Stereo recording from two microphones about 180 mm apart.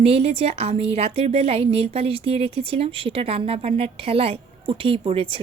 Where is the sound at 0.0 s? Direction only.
35° right (ahead or behind).